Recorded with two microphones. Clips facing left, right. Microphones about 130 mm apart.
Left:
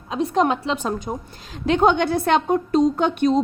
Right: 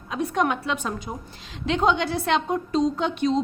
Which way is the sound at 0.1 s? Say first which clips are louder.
Left 4 dB; 30° left (ahead or behind).